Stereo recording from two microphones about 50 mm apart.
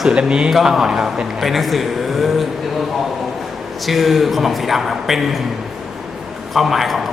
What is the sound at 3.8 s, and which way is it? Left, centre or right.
A man's voice, centre.